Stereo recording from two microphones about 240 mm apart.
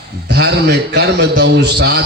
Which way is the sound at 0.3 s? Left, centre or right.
Right.